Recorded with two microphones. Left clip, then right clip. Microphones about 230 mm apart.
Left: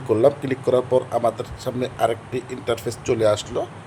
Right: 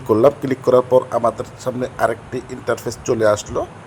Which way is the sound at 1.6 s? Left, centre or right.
Centre.